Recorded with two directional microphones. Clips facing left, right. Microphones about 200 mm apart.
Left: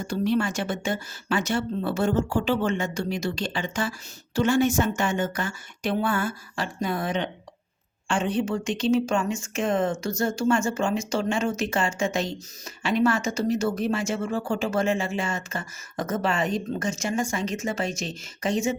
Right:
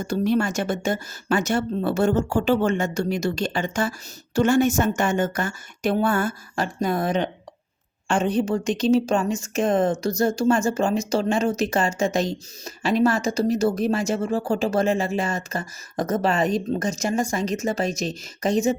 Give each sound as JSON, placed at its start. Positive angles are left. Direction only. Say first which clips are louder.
{"t": 0.0, "sound": "a woman's voice", "louder": "right 3 dB", "side_deg": -45}